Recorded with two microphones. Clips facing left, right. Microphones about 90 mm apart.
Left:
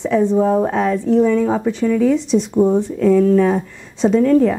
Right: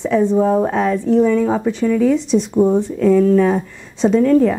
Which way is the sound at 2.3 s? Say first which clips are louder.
Even; 30° right (ahead or behind).